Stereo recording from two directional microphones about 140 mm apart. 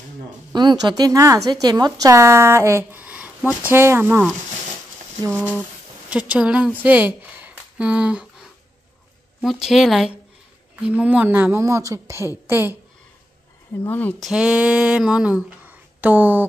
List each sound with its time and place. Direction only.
0.5 s a woman's voice: 30° right (ahead or behind); by 4.3 s 15° right (ahead or behind)
5.3 s speech: 15° right (ahead or behind)
9.4 s a woman's voice: centre (ahead or behind)
13.8 s speech: 10° left (ahead or behind)
14.2 s speech: 5° right (ahead or behind)